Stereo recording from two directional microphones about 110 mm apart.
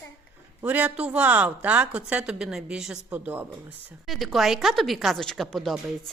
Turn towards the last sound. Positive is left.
turn(degrees=0)  # may be behind; listen again after turning